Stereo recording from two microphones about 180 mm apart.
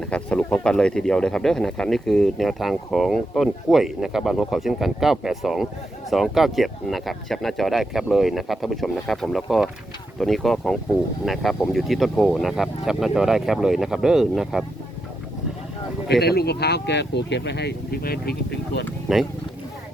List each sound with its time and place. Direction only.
0.0 s speech: 5° left (ahead or behind)
16.2 s speech: 60° left (ahead or behind)
19.1 s speech: centre (ahead or behind)